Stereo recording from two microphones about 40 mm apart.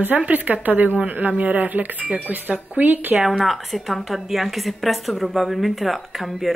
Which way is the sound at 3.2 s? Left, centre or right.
Centre.